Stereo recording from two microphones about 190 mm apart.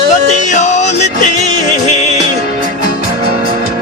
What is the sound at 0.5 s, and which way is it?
Music, 40° left (ahead or behind).